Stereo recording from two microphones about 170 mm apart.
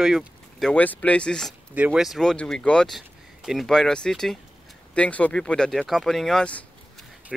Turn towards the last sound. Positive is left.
turn(degrees=5)  # may be behind; listen again after turning